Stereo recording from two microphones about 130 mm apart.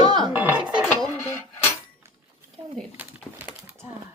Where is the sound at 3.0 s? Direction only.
10° right (ahead or behind).